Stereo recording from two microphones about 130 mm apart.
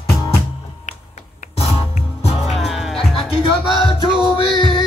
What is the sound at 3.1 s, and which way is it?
Music, 40° left (ahead or behind).